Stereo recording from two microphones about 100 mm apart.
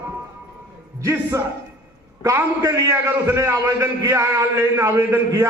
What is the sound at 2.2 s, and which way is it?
A man's voice, 30° right (ahead or behind).